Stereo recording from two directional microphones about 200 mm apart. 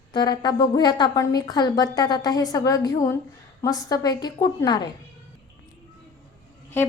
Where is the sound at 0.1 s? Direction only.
20° left (ahead or behind).